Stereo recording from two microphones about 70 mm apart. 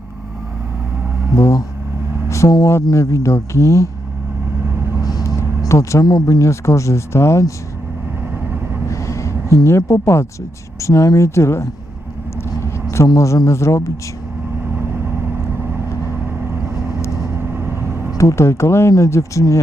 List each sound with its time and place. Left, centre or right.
1.4 s speech: left
5.4 s vehicle: left
6.2 s speech: left
8.9 s vehicle: left
10.8 s speech: left
12.6 s vehicle: left
13.1 s speech: left
17.5 s vehicle: right
18.2 s speech: left